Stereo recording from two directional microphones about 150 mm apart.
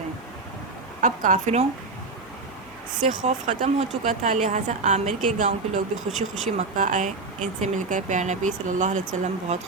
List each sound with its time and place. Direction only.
1.0 s speech: 55° right (ahead or behind)
3.1 s a woman's voice: 55° right (ahead or behind)